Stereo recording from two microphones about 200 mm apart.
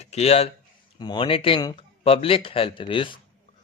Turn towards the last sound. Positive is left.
turn(degrees=25)  # may be behind; listen again after turning